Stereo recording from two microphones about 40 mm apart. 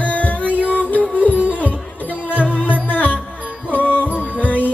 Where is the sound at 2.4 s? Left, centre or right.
Left.